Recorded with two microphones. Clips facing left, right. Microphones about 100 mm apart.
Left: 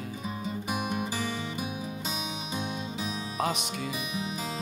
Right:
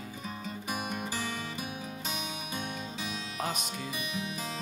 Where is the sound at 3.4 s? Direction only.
60° left (ahead or behind).